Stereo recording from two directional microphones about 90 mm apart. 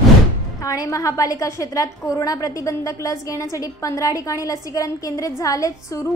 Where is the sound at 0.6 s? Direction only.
40° left (ahead or behind).